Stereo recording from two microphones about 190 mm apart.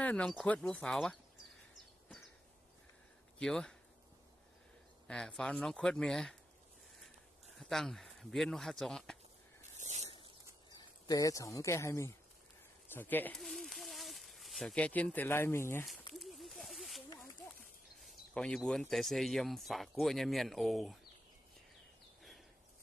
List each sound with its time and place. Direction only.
0.0 s speech: 5° left (ahead or behind)
3.3 s speech: 5° left (ahead or behind)
5.0 s speech: 5° left (ahead or behind)
7.5 s speech: centre (ahead or behind)
9.8 s a sound: 35° right (ahead or behind)
10.8 s speech: 20° left (ahead or behind)
16.1 s a sound: centre (ahead or behind)
17.2 s speech: 5° left (ahead or behind)